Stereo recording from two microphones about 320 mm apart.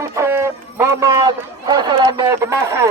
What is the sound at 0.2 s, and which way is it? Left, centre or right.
Speech, centre.